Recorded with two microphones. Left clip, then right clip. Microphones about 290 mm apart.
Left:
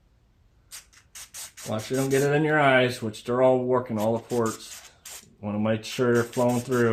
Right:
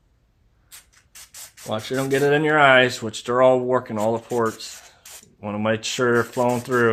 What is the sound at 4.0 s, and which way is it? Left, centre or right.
Rub, centre.